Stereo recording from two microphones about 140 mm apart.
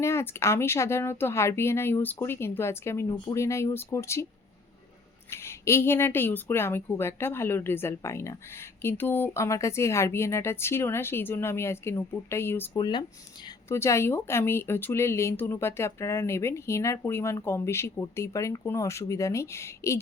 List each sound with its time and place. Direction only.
0.0 s speech: 20° left (ahead or behind)
5.3 s a woman's voice: 20° left (ahead or behind)
12.8 s speech: 30° left (ahead or behind)
13.7 s speech: 20° left (ahead or behind)